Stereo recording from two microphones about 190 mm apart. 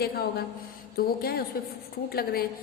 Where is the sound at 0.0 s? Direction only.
55° left (ahead or behind).